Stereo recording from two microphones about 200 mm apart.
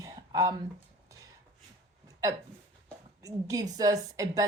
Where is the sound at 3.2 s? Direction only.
15° right (ahead or behind).